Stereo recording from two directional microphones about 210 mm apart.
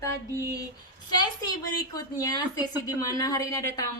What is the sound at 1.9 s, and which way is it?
A woman's voice, 15° left (ahead or behind).